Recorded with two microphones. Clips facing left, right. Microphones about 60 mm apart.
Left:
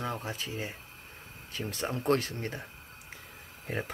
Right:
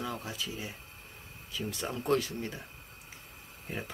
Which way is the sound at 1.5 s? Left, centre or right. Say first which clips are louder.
Left 2 dB; left.